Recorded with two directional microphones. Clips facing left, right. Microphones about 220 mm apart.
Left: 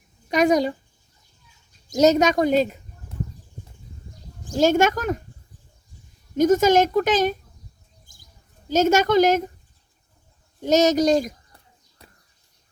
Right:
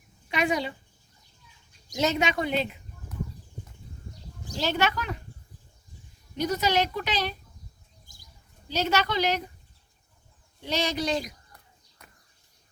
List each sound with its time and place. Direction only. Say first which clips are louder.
0.3 s speech: left 9 dB; 40° left (ahead or behind)
1.9 s speech: left 9 dB; 40° left (ahead or behind)
4.4 s a woman's voice: left 10 dB; 45° left (ahead or behind)
6.3 s a woman's voice: left 10 dB; 45° left (ahead or behind)
8.0 s bird: even; 50° left (ahead or behind)
10.6 s a woman's voice: left 11 dB; 45° left (ahead or behind)
12.0 s crow: left 4 dB; 30° left (ahead or behind)